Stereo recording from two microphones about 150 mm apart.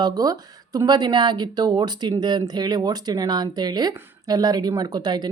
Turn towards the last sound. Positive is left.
turn(degrees=-25)  # may be behind; listen again after turning